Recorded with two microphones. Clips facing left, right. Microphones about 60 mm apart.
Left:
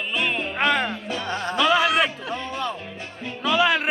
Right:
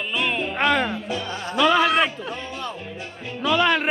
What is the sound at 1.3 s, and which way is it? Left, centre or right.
Speech, left.